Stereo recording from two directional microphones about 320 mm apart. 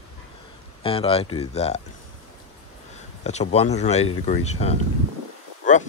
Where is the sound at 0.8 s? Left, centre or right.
Centre.